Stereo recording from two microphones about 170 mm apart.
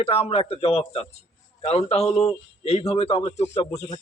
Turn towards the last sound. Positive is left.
turn(degrees=40)  # may be behind; listen again after turning